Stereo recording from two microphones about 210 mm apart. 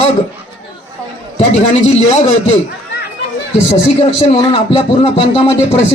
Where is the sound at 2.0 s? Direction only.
30° left (ahead or behind).